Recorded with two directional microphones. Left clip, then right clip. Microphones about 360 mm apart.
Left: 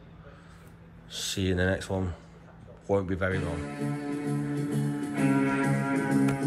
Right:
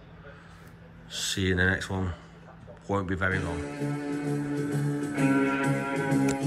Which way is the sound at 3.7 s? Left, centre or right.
Left.